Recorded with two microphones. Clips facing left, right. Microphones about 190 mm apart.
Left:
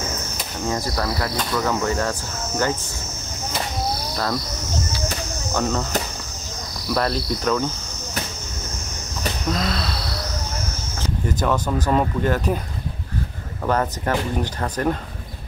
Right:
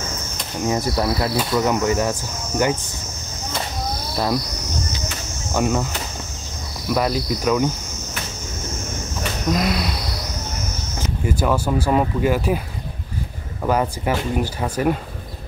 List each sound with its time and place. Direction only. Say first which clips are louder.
0.7 s insect: right 4 dB; 20° right (ahead or behind)
1.3 s speech: right 3 dB; 15° right (ahead or behind)
5.5 s speech: right 3 dB; 10° right (ahead or behind)
6.9 s speech: right 2 dB; 10° right (ahead or behind)
9.5 s speech: right 4 dB; 15° right (ahead or behind)
11.2 s speech: right 2 dB; 10° right (ahead or behind)
13.6 s speech: right 2 dB; 10° right (ahead or behind)